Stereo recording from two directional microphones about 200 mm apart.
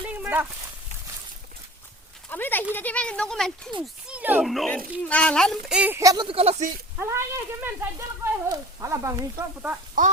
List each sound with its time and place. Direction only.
0.0 s dog: 10° right (ahead or behind)
2.3 s speech: 10° left (ahead or behind)
4.1 s speech: 5° right (ahead or behind); by 6.7 s 35° right (ahead or behind)
7.0 s speech: 15° right (ahead or behind)
10.0 s a sound: 45° right (ahead or behind)